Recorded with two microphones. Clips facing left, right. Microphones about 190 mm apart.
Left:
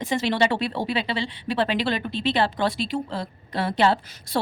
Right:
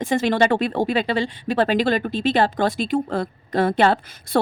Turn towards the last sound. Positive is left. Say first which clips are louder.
# right 2 dB
turn(degrees=-55)  # may be behind; listen again after turning